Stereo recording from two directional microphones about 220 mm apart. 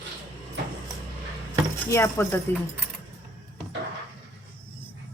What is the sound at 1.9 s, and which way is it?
Speech, 10° left (ahead or behind).